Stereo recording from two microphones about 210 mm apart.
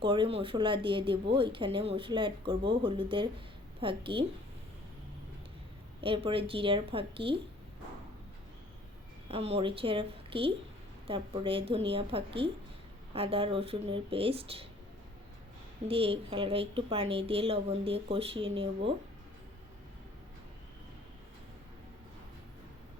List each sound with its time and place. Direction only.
0.0 s speech: 25° right (ahead or behind)
6.0 s speech: 25° right (ahead or behind)
9.3 s speech: 30° right (ahead or behind)
15.9 s speech: 25° right (ahead or behind)